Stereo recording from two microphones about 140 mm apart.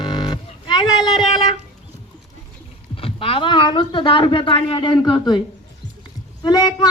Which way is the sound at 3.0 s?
40° left (ahead or behind).